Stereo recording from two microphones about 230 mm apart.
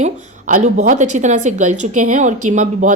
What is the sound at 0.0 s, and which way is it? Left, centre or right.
Speech, right.